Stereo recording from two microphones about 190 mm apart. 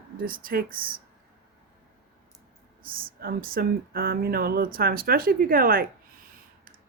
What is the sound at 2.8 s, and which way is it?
Speech, 50° right (ahead or behind).